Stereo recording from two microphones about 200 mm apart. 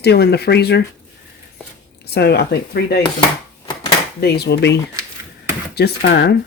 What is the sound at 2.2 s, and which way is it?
Speech, 55° left (ahead or behind).